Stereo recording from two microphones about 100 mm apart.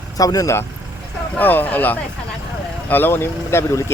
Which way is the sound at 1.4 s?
20° left (ahead or behind).